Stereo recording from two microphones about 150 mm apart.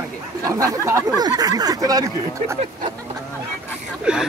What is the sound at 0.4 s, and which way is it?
Speech, 20° right (ahead or behind).